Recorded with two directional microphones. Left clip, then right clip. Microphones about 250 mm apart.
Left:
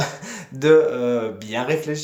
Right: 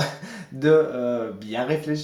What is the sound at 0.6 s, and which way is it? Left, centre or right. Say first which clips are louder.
Speech: left 4 dB; left.